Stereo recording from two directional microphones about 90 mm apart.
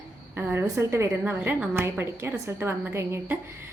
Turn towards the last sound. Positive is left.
turn(degrees=-30)  # may be behind; listen again after turning